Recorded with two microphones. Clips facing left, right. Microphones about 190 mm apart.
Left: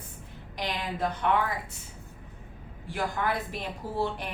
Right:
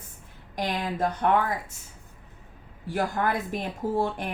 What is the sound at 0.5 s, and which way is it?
Speech, 45° right (ahead or behind).